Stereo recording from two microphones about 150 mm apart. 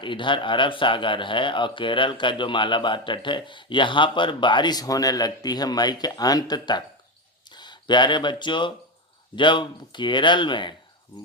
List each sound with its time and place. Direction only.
0.0 s speech: 35° left (ahead or behind)